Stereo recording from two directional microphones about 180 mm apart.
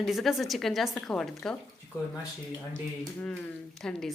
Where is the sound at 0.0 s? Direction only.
Centre (ahead or behind).